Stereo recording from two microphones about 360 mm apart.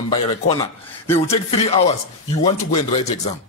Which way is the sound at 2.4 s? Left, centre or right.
Centre.